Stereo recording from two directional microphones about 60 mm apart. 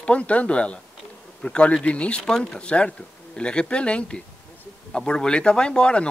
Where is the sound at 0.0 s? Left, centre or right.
Left.